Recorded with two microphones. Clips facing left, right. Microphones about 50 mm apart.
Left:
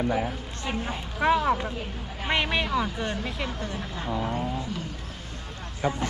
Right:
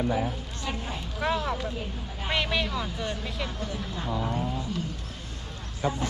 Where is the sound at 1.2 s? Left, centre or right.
Left.